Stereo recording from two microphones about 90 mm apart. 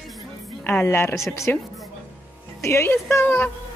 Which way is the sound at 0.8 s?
30° left (ahead or behind).